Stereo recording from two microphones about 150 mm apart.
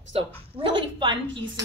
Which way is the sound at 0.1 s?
40° right (ahead or behind).